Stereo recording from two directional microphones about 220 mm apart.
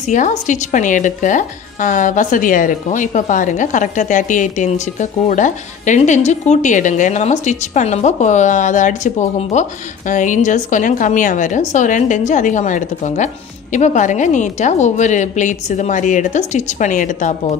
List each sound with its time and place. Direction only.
0.0 s a woman's voice: 35° left (ahead or behind)